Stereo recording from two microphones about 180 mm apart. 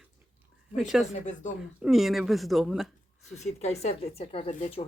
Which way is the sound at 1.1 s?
40° left (ahead or behind).